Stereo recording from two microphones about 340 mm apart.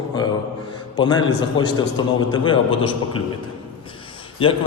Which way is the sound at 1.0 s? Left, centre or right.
Centre.